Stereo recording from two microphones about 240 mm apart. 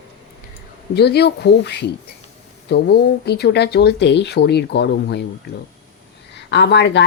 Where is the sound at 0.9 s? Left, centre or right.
Left.